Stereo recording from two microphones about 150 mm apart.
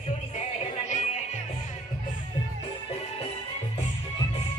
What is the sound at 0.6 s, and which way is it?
Music, 40° left (ahead or behind).